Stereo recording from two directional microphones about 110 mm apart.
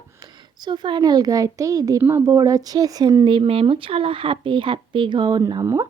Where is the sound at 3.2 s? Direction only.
55° right (ahead or behind).